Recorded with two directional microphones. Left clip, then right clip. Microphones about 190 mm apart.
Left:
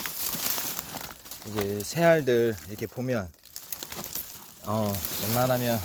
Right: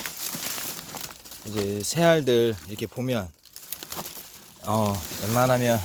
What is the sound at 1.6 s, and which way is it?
Speech, 25° right (ahead or behind).